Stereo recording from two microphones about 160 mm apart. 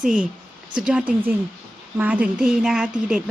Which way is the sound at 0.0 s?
5° right (ahead or behind).